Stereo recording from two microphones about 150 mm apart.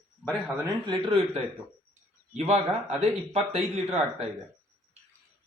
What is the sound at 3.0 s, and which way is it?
Speech, 45° right (ahead or behind).